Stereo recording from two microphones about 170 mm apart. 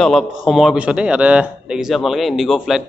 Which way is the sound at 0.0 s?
Centre (ahead or behind).